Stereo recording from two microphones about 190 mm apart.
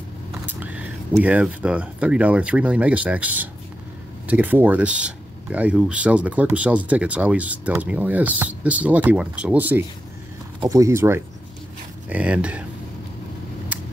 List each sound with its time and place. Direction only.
0.5 s vehicle: 10° right (ahead or behind)
1.2 s speech: 5° right (ahead or behind)